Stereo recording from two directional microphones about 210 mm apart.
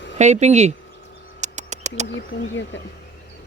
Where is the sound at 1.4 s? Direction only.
35° right (ahead or behind).